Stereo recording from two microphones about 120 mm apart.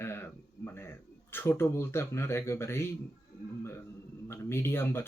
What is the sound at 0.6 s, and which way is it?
Speech, 20° left (ahead or behind).